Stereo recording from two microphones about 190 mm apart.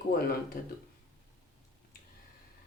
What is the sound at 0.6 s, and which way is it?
Speech, 50° left (ahead or behind).